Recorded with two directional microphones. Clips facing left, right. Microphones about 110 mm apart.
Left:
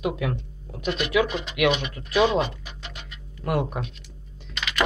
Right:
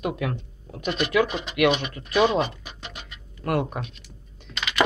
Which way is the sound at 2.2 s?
5° right (ahead or behind).